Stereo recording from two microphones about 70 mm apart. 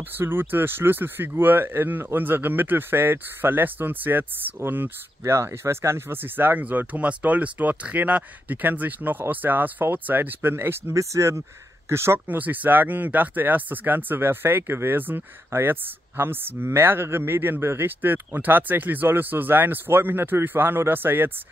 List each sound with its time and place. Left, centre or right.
0.2 s speech: right
5.2 s speech: right
12.4 s speech: right